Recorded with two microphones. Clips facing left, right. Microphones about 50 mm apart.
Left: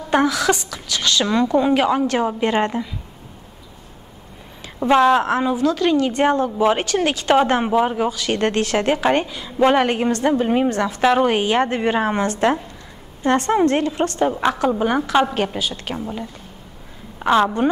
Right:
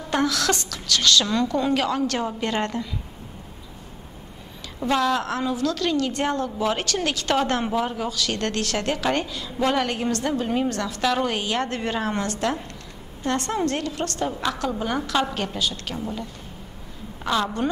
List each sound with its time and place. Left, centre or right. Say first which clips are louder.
0.1 s a woman's voice: left 5 dB; centre
4.7 s a woman's voice: left 8 dB; left
17.2 s a sound: left 8 dB; left